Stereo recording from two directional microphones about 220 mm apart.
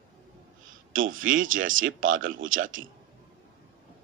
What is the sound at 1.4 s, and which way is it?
Speech, 65° right (ahead or behind).